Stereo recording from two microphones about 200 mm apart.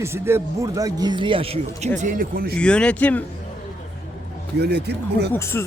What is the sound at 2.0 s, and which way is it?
Speech, 40° right (ahead or behind).